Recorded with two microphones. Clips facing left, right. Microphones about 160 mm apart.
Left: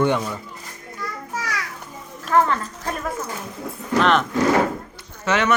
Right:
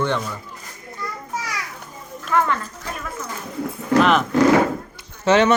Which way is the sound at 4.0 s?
5° right (ahead or behind).